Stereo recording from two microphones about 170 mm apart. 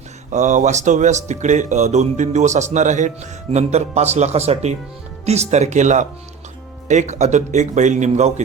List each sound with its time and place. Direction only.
0.3 s speech: 45° right (ahead or behind)